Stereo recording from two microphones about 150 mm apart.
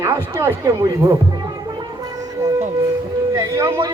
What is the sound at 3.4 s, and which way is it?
Speech, 20° right (ahead or behind).